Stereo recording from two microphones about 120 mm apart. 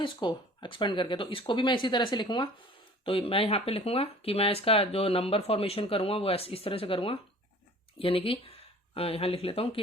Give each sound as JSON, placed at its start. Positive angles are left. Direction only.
{"t": 0.0, "sound": "speech", "side_deg": 40}
{"t": 3.0, "sound": "speech", "side_deg": 50}